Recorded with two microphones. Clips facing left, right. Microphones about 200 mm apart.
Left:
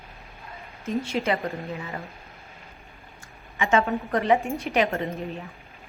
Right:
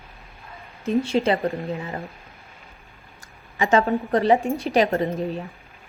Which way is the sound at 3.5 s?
35° right (ahead or behind).